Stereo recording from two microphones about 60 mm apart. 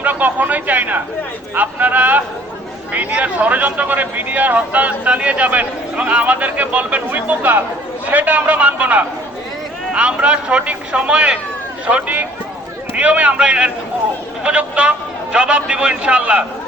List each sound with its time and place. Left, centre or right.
0.0 s speech: right
11.9 s speech: right